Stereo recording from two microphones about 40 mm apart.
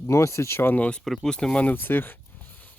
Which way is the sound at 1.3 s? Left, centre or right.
Centre.